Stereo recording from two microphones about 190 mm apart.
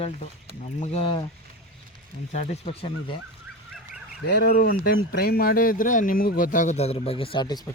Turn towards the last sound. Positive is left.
turn(degrees=20)  # may be behind; listen again after turning